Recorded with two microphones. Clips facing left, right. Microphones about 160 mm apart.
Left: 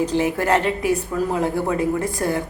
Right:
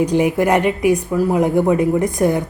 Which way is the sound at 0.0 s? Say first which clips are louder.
Right 5 dB; 15° right (ahead or behind).